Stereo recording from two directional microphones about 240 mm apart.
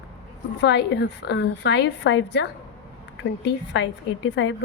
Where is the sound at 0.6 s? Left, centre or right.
Left.